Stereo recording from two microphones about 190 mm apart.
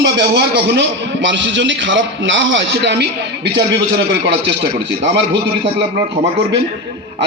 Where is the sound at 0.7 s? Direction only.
70° right (ahead or behind).